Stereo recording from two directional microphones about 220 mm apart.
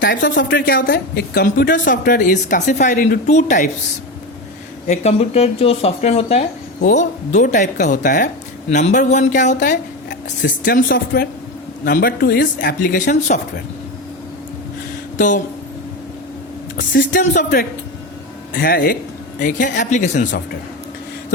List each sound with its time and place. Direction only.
0.3 s speech: 45° left (ahead or behind)
4.9 s speech: 30° left (ahead or behind)
17.0 s speech: 40° left (ahead or behind)